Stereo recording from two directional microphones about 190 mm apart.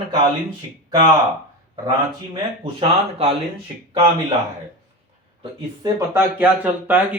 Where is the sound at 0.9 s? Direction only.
20° right (ahead or behind).